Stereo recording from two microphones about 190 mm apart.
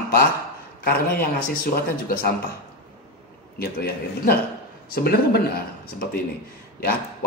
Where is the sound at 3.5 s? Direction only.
55° left (ahead or behind).